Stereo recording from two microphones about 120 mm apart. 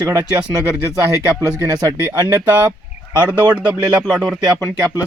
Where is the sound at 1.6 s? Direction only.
30° right (ahead or behind).